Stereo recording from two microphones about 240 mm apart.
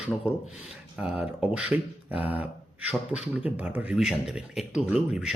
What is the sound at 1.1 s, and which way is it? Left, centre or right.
Speech, centre.